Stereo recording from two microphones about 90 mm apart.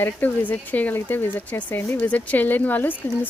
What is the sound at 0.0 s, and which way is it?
Speech, 20° left (ahead or behind).